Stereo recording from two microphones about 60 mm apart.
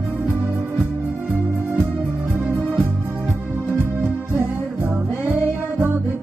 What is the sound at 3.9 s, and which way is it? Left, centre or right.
Music, right.